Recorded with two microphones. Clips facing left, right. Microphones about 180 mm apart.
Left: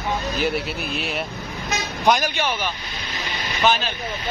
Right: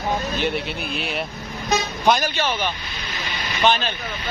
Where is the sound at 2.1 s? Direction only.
10° left (ahead or behind).